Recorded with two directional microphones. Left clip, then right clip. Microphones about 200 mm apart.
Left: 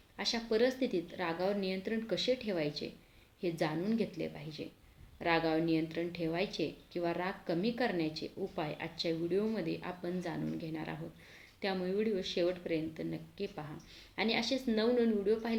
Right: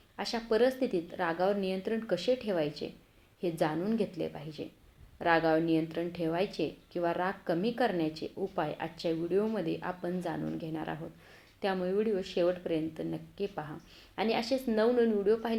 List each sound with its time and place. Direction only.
0.3 s a woman's voice: 5° right (ahead or behind)